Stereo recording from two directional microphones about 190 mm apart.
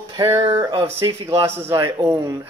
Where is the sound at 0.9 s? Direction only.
15° right (ahead or behind).